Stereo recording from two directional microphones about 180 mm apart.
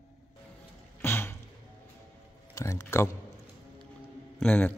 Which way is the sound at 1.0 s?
15° left (ahead or behind).